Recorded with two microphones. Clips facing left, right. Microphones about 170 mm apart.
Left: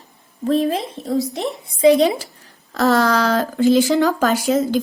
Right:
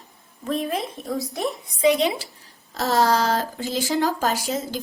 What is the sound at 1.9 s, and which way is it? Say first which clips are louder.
Speech: left 7 dB; 40° left (ahead or behind).